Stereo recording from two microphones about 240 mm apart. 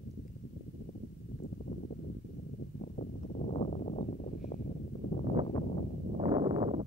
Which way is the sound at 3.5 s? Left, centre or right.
Left.